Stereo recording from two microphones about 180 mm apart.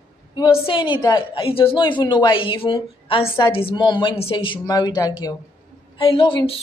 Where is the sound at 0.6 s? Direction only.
25° left (ahead or behind).